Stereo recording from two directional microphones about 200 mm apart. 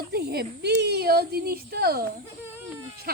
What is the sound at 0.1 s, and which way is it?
Speech, 55° right (ahead or behind).